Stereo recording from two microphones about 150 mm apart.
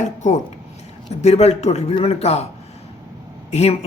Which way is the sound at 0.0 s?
55° left (ahead or behind).